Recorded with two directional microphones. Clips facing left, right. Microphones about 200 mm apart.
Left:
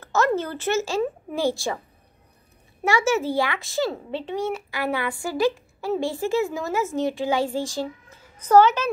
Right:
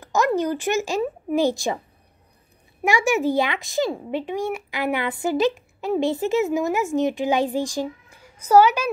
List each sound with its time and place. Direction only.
0.0 s speech: 15° right (ahead or behind)
2.8 s a child's voice: 15° right (ahead or behind)